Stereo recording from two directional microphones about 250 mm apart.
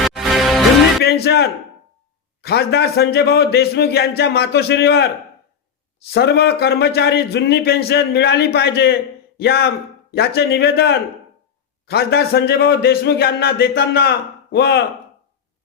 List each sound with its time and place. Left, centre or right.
0.0 s music: centre
1.0 s speech: left
6.1 s speech: left